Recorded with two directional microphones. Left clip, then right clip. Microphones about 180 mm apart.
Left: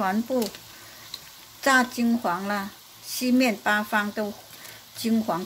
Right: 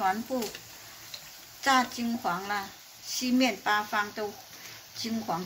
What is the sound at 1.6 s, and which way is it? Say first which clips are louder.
Speech: left 4 dB; 65° left (ahead or behind).